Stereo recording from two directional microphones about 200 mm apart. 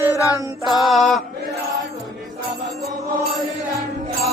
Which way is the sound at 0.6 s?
Centre (ahead or behind).